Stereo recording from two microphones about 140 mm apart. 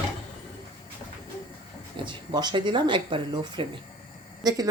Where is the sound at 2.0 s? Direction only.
30° right (ahead or behind).